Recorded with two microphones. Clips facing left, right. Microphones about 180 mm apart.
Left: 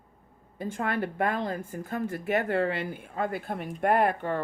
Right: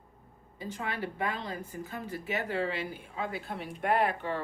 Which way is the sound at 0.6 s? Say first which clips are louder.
Left 6 dB; 50° left (ahead or behind).